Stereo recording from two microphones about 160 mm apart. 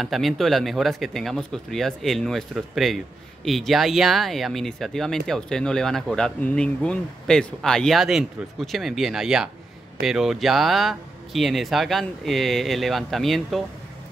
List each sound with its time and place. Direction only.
0.0 s speech: centre (ahead or behind)